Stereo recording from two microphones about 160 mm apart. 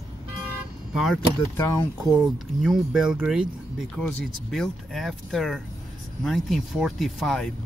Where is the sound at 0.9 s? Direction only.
Centre (ahead or behind).